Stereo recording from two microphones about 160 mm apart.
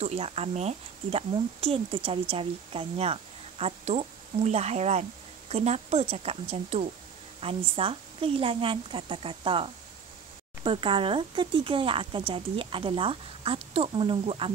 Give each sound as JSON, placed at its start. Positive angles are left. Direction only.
{"t": 0.0, "sound": "speech", "side_deg": -40}